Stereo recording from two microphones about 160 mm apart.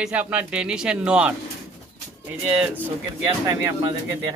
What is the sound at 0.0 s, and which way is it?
Speech, 10° right (ahead or behind).